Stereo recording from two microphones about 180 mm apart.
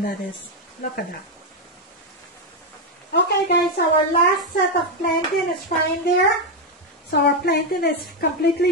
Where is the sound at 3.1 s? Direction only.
65° left (ahead or behind).